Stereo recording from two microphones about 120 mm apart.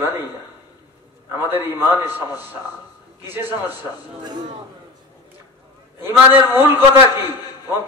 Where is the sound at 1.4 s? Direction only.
15° right (ahead or behind).